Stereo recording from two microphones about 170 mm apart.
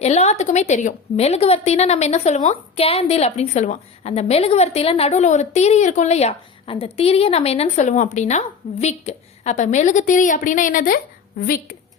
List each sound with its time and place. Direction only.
0.0 s a woman's voice: 40° left (ahead or behind); by 11.8 s 60° left (ahead or behind)